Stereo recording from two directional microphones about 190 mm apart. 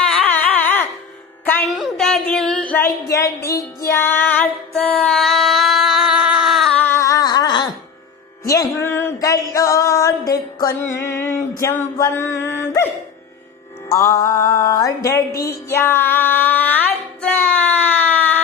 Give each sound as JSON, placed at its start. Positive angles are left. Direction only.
{"t": 0.1, "sound": "a sound", "side_deg": 10}
{"t": 1.5, "sound": "music", "side_deg": 10}
{"t": 1.7, "sound": "a sound", "side_deg": 0}
{"t": 11.0, "sound": "mantra", "side_deg": 15}
{"t": 11.6, "sound": "music", "side_deg": 15}
{"t": 13.9, "sound": "mantra", "side_deg": 15}
{"t": 15.4, "sound": "female singing", "side_deg": 10}